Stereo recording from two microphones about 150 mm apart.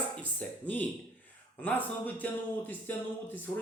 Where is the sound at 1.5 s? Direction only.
10° left (ahead or behind).